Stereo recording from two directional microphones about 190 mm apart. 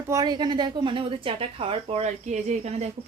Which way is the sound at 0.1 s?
20° right (ahead or behind).